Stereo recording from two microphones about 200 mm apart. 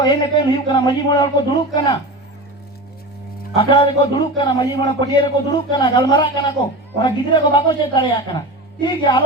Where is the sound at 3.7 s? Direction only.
20° left (ahead or behind).